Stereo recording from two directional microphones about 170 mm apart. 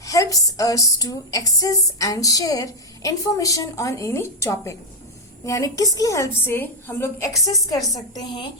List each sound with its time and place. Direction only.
0.0 s speech: 20° left (ahead or behind)